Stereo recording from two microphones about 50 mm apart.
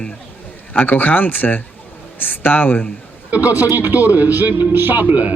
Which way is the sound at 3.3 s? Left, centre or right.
Right.